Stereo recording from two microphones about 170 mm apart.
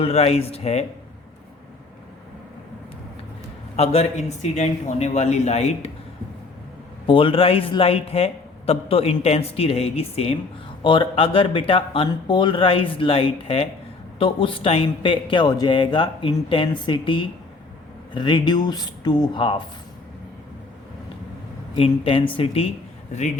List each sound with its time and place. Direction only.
0.0 s a man's voice: 35° left (ahead or behind)
4.5 s a man's voice: 40° left (ahead or behind)
7.1 s a man's voice: 30° left (ahead or behind)
21.8 s a man's voice: 35° left (ahead or behind)